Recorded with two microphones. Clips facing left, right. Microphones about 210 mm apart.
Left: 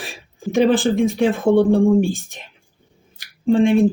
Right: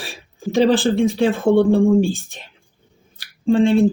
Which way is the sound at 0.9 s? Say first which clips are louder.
Even; 15° left (ahead or behind).